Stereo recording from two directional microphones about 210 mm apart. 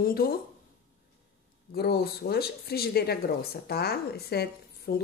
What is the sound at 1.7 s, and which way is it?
Speech, 50° left (ahead or behind).